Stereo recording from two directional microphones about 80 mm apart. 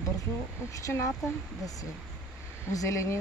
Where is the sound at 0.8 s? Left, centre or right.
Left.